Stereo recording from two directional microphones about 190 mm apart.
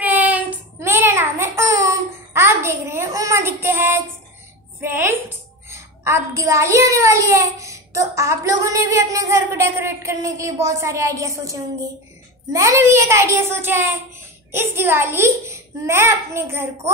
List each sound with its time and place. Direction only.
0.0 s child singing: 10° right (ahead or behind)
4.8 s a sound: 10° right (ahead or behind)
12.5 s a child's voice: 15° right (ahead or behind)